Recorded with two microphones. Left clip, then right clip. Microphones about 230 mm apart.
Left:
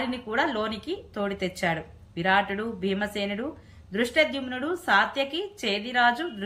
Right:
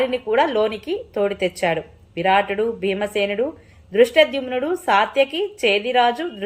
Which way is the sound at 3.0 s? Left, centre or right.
Centre.